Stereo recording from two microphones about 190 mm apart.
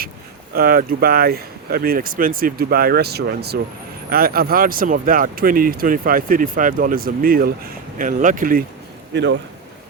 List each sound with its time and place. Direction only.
0.5 s speech: 50° right (ahead or behind)
9.1 s speech: 65° right (ahead or behind)